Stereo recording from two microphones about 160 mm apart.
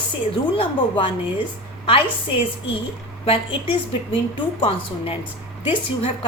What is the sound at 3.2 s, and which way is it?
Speech, 35° left (ahead or behind).